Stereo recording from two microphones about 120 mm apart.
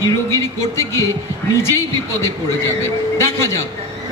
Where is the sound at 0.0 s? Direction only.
25° left (ahead or behind).